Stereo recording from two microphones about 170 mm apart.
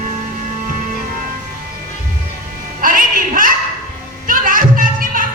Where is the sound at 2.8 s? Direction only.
55° right (ahead or behind).